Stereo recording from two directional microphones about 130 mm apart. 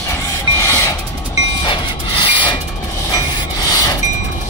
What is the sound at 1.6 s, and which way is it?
Rub, 40° left (ahead or behind).